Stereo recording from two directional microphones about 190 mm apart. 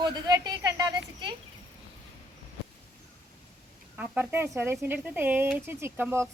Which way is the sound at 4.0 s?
10° right (ahead or behind).